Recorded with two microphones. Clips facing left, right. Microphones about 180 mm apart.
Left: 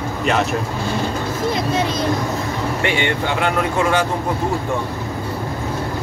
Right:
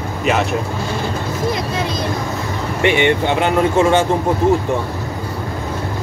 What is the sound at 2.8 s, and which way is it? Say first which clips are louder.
Speech: right 8 dB; 20° right (ahead or behind).